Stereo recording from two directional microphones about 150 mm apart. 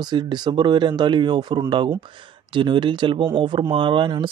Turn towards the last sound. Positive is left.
turn(degrees=-35)  # may be behind; listen again after turning